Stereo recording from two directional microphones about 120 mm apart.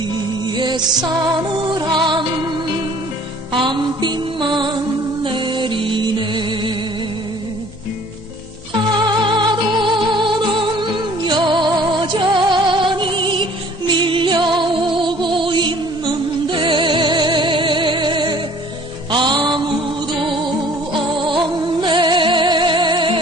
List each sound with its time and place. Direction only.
0.4 s music: 40° right (ahead or behind)
8.9 s music: 40° right (ahead or behind)
21.2 s music: 40° right (ahead or behind)